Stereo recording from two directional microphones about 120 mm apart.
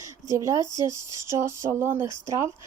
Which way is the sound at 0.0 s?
25° right (ahead or behind).